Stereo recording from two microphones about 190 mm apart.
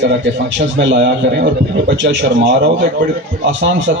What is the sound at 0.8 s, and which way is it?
A man's voice, 75° right (ahead or behind).